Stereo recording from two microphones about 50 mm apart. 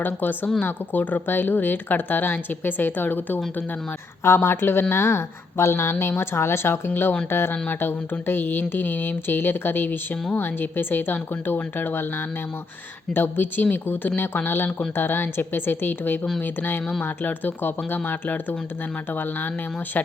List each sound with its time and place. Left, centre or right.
0.0 s a woman's voice: left
4.2 s speech: left
5.0 s a woman's voice: left